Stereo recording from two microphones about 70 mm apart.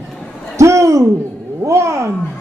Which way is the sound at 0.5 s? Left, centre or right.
Right.